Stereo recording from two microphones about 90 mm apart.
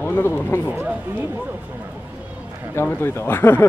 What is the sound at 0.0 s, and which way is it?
Speech, 25° left (ahead or behind).